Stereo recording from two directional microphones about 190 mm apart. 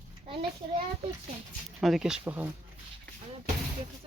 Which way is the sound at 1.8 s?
Centre (ahead or behind).